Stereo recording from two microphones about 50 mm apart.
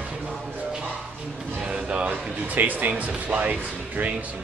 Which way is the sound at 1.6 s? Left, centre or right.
Centre.